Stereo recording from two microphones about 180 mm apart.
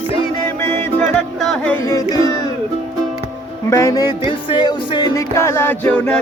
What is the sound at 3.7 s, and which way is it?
Music, 20° left (ahead or behind).